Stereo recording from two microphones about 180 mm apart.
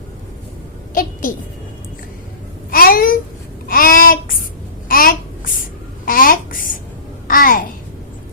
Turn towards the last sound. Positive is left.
turn(degrees=50)  # may be behind; listen again after turning